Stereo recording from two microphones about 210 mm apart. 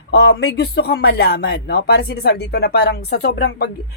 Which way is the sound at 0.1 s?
55° left (ahead or behind).